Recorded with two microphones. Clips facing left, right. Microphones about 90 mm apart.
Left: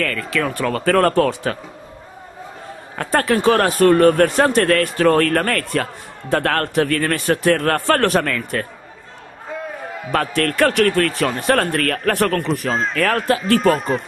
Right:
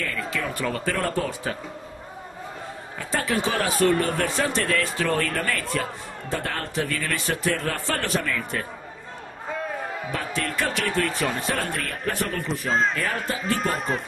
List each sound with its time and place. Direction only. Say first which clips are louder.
0.0 s speech: left 7 dB; 70° left (ahead or behind)
3.0 s speech: left 8 dB; 60° left (ahead or behind)
10.1 s speech: left 11 dB; 65° left (ahead or behind)
12.7 s speech: left 1 dB; centre (ahead or behind)
13.0 s speech: left 10 dB; 75° left (ahead or behind)
13.6 s speech: left 9 dB; centre (ahead or behind)